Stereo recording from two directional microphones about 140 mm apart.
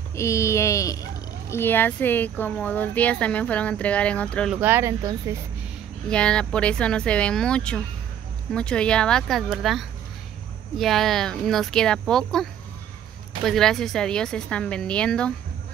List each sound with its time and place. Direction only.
0.1 s speech: 20° left (ahead or behind)
4.6 s speech: 15° right (ahead or behind)
6.0 s speech: 5° left (ahead or behind)